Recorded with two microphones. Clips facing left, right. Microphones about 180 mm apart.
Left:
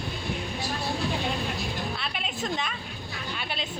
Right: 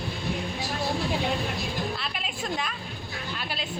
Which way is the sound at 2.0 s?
Centre (ahead or behind).